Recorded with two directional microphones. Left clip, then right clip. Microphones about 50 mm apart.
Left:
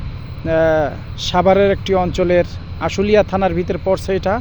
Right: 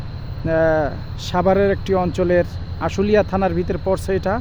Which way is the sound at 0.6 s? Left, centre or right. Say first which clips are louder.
Left 3 dB; right.